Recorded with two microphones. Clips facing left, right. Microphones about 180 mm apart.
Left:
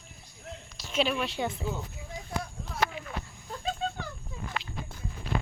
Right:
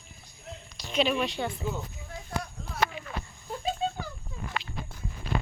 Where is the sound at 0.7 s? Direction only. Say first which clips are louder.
Right 2 dB; 5° left (ahead or behind).